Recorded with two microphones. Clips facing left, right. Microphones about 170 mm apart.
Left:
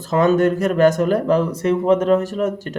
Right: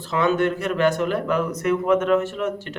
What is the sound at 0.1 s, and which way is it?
Speech, 40° left (ahead or behind).